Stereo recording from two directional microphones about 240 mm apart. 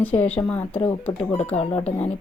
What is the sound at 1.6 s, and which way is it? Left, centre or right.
Speech, left.